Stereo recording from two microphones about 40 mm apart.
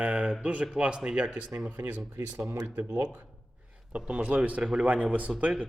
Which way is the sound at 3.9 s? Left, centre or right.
Right.